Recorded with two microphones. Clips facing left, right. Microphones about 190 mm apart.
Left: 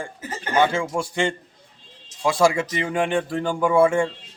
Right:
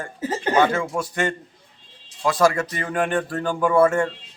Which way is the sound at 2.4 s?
15° left (ahead or behind).